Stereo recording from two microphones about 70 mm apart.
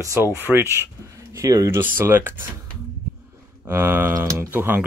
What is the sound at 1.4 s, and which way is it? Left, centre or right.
Speech, right.